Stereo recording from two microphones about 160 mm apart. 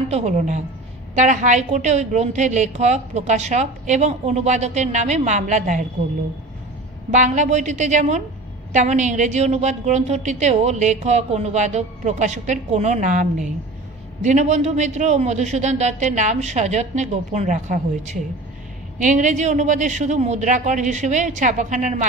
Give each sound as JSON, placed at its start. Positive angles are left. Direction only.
{"t": 0.1, "sound": "a woman's voice", "side_deg": -45}
{"t": 7.1, "sound": "a woman's voice", "side_deg": -50}